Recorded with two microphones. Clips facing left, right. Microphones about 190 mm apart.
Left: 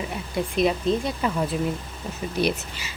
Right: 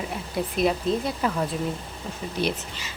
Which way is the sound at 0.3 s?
Centre (ahead or behind).